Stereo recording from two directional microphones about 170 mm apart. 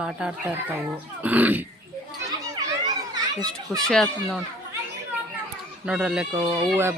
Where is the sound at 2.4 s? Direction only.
20° right (ahead or behind).